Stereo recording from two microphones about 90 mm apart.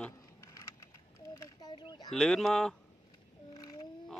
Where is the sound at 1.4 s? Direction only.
45° left (ahead or behind).